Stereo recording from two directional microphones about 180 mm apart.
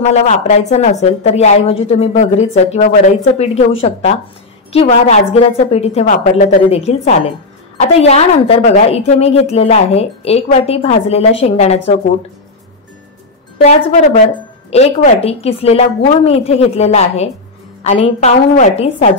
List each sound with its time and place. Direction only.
0.0 s a woman's voice: 40° left (ahead or behind)
13.6 s a woman's voice: 40° left (ahead or behind)